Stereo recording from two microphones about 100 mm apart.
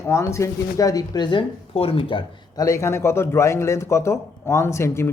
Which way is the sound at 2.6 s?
30° left (ahead or behind).